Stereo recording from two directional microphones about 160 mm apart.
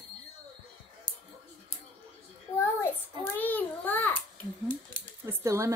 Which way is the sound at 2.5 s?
25° left (ahead or behind).